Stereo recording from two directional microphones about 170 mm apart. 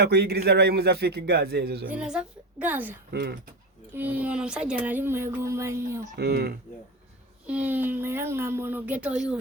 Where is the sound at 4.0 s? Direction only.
10° right (ahead or behind).